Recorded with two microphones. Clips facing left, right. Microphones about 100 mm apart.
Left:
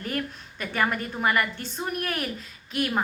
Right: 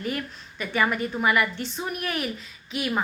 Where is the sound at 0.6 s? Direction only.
45° left (ahead or behind).